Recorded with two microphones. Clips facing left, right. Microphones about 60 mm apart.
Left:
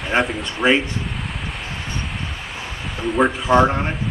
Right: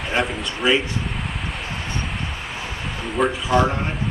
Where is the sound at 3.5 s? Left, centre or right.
Left.